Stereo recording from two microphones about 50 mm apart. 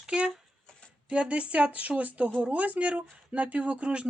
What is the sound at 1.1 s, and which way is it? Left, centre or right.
Speech, right.